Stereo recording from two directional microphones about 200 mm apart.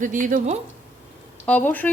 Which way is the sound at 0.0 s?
40° right (ahead or behind).